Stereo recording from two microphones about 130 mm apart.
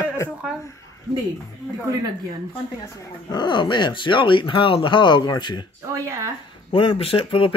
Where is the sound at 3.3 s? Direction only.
35° left (ahead or behind).